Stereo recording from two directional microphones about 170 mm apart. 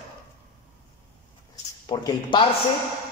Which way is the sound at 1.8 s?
25° left (ahead or behind).